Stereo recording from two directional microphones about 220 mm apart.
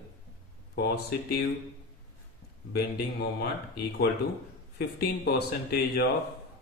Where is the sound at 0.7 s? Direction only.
45° left (ahead or behind).